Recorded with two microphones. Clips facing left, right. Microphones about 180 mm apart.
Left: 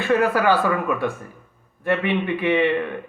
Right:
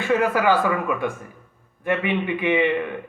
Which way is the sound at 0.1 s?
15° right (ahead or behind).